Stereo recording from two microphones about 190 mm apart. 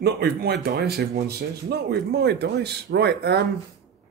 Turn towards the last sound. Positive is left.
turn(degrees=-60)  # may be behind; listen again after turning